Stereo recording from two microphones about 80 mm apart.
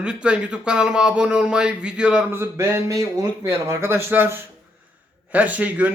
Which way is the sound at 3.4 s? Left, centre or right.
Right.